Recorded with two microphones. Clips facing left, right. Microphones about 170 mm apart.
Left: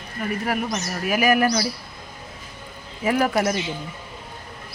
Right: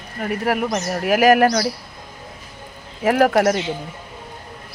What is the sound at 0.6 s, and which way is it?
Speech, 60° right (ahead or behind).